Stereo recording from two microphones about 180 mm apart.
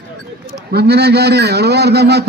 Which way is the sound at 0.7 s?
65° right (ahead or behind).